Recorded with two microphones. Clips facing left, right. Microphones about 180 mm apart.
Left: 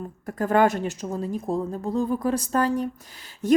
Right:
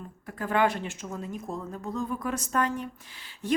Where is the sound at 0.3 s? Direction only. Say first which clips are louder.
Left 6 dB; 45° left (ahead or behind).